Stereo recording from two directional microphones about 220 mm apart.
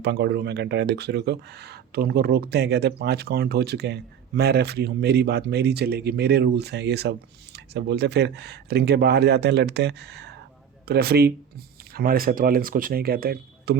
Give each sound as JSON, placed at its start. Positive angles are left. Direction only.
{"t": 0.0, "sound": "speech", "side_deg": -50}